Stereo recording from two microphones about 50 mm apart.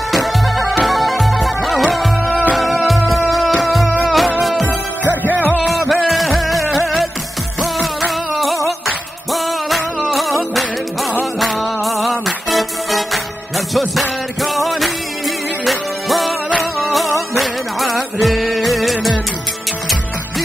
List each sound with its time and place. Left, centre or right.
0.1 s music: centre
5.7 s music: centre
16.3 s music: centre
16.9 s music: centre